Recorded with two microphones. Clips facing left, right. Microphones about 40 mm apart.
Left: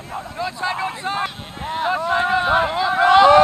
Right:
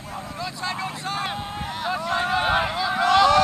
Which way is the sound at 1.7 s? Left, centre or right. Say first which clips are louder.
Left 7 dB; left.